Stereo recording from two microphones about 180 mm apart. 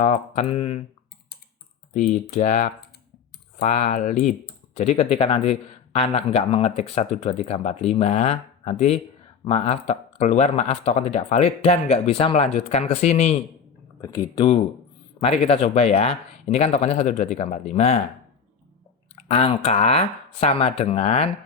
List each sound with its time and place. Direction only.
0.0 s speech: 40° left (ahead or behind)
1.9 s speech: 45° left (ahead or behind)
14.0 s speech: 25° left (ahead or behind)
19.1 s speech: 35° left (ahead or behind)